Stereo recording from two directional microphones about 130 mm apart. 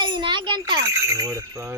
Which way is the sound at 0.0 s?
35° right (ahead or behind).